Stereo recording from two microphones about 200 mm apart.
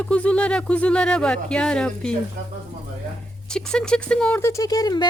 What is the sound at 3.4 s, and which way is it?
Speech, 5° left (ahead or behind).